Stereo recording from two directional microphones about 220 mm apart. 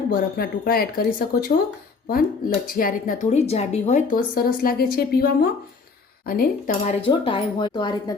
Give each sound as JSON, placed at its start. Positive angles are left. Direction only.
{"t": 0.1, "sound": "speech", "side_deg": 40}
{"t": 2.6, "sound": "a woman's voice", "side_deg": 40}
{"t": 7.0, "sound": "a woman's voice", "side_deg": 20}